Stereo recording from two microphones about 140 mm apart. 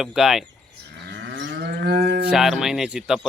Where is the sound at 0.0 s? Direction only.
5° right (ahead or behind).